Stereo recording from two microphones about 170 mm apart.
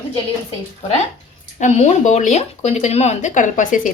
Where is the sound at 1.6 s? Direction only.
45° left (ahead or behind).